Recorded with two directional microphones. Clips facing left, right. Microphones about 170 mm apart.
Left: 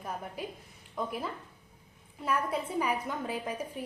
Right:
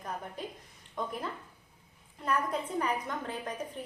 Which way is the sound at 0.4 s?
10° left (ahead or behind).